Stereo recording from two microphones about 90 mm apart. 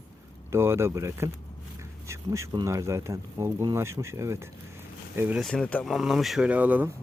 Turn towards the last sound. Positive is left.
turn(degrees=-20)  # may be behind; listen again after turning